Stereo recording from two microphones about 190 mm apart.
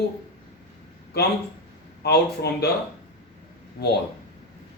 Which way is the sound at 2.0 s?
60° left (ahead or behind).